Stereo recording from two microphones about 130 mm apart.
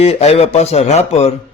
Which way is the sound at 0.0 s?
55° left (ahead or behind).